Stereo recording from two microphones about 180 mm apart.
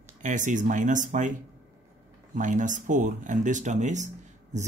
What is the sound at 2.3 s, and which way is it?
Speech, 45° right (ahead or behind).